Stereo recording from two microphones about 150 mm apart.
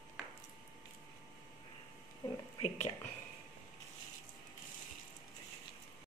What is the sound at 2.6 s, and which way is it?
Speech, 50° left (ahead or behind).